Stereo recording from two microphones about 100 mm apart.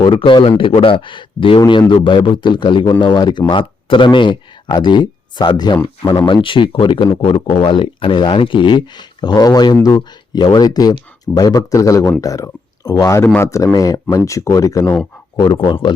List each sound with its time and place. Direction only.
0.0 s speech: 60° left (ahead or behind); by 14.9 s 35° left (ahead or behind)
15.5 s speech: 50° left (ahead or behind)